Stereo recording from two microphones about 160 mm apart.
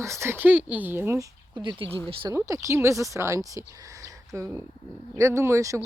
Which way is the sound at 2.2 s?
20° right (ahead or behind).